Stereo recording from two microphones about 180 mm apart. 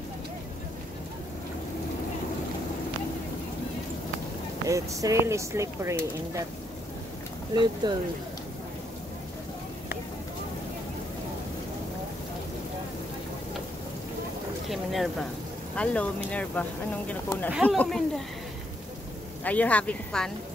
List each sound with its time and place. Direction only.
4.6 s speech: 20° right (ahead or behind)
7.5 s speech: 25° right (ahead or behind)
14.7 s a sound: centre (ahead or behind)
15.7 s speech: 5° left (ahead or behind)
19.4 s speech: 10° left (ahead or behind)